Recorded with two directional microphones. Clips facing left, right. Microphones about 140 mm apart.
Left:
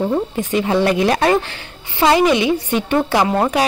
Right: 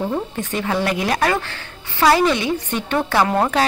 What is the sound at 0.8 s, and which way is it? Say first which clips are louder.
A woman's voice: left 3 dB; 25° left (ahead or behind).